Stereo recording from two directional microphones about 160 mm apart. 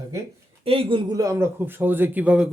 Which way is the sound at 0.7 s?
35° right (ahead or behind).